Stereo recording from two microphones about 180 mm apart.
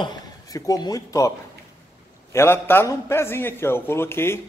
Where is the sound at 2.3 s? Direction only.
10° left (ahead or behind).